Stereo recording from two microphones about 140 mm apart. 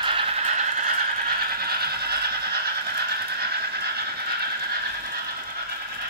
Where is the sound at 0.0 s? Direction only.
40° right (ahead or behind).